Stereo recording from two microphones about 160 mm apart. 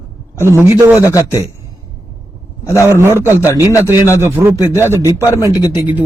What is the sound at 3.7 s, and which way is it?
Speech, 20° left (ahead or behind).